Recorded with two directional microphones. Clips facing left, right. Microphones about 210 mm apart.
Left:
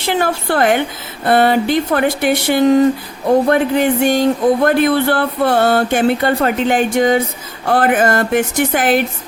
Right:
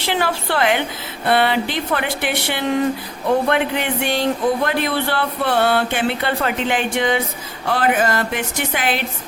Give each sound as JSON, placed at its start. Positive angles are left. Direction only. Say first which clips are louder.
{"t": 0.1, "sound": "speech", "louder": "left 4 dB", "side_deg": 45}